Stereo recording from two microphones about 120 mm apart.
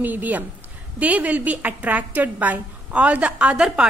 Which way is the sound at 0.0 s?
15° right (ahead or behind).